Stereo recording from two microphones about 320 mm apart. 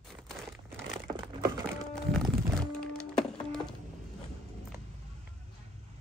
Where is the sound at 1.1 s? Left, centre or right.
Centre.